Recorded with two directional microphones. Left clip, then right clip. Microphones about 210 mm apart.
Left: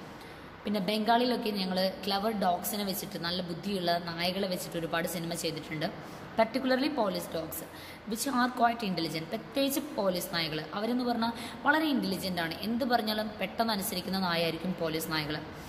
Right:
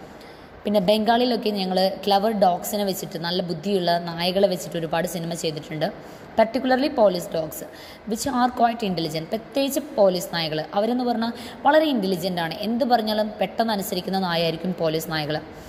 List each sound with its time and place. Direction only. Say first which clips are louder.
0.7 s a woman's voice: right 10 dB; 30° right (ahead or behind)